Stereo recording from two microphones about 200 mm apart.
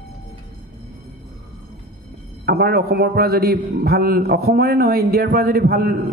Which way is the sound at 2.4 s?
50° right (ahead or behind).